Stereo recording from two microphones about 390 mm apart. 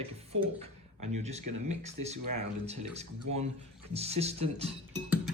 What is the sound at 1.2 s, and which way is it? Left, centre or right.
Speech, centre.